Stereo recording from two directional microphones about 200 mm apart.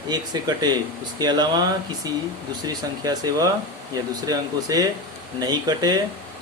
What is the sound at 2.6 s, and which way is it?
Speech, 20° right (ahead or behind).